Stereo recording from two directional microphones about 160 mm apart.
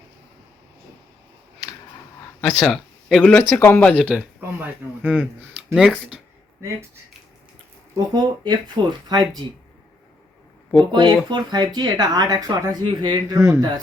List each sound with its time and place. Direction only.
2.6 s speech: centre (ahead or behind)
4.1 s speech: 10° right (ahead or behind)
7.9 s speech: 25° right (ahead or behind)
10.9 s speech: 30° right (ahead or behind)